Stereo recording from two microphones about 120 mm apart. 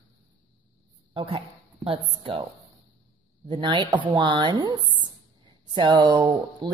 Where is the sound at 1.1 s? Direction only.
50° right (ahead or behind).